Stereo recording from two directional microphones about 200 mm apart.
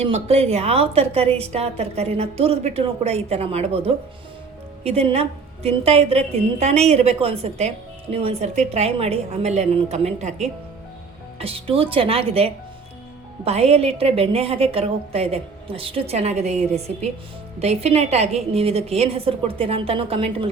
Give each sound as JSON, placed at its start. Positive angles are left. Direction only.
{"t": 0.0, "sound": "a woman's voice", "side_deg": -30}